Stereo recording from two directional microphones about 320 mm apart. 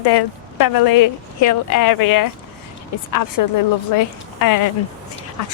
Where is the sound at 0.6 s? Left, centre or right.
Left.